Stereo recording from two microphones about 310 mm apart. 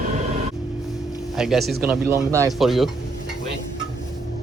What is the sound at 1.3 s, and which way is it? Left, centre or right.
Speech, centre.